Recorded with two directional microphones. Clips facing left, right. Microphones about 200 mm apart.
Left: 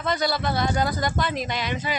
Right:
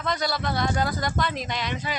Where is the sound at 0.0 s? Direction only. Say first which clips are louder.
Left 3 dB; centre (ahead or behind).